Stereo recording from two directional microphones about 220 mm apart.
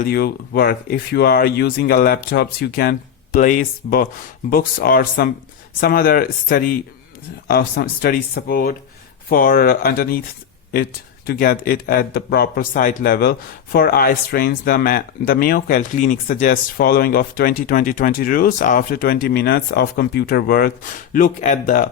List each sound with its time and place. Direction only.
0.0 s speech: 45° left (ahead or behind)
11.3 s speech: 40° left (ahead or behind)